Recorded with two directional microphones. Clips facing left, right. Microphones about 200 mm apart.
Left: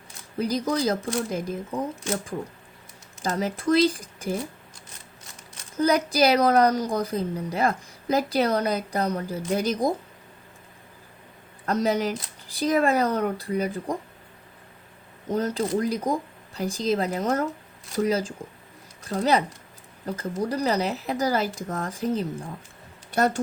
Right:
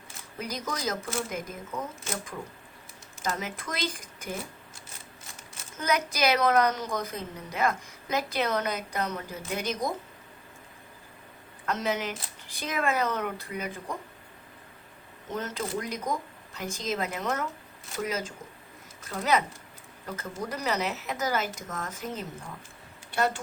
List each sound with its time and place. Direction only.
0.3 s a woman's voice: 35° left (ahead or behind)
3.2 s a woman's voice: 35° left (ahead or behind)
5.7 s a woman's voice: 35° left (ahead or behind)
11.6 s a woman's voice: 35° left (ahead or behind)
15.3 s a woman's voice: 35° left (ahead or behind)